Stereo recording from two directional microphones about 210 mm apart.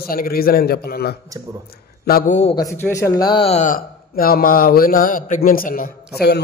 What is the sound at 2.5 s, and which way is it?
A man's voice, 15° left (ahead or behind).